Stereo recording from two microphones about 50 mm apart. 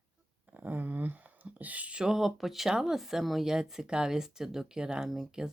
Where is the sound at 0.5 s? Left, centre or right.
Right.